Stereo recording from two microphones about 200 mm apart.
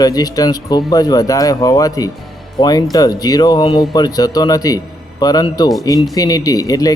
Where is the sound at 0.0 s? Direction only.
20° left (ahead or behind).